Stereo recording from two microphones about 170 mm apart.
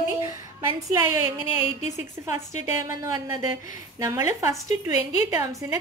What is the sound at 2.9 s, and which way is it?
A woman's voice, 20° right (ahead or behind).